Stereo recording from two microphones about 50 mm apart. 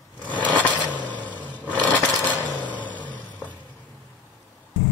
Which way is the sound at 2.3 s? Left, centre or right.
Left.